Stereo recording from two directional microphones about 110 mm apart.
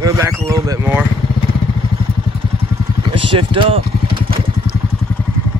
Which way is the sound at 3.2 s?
50° right (ahead or behind).